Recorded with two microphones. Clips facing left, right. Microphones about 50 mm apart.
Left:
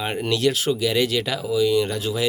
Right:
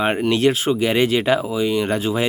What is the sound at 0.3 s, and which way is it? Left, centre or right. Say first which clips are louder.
Speech: right 1 dB; right.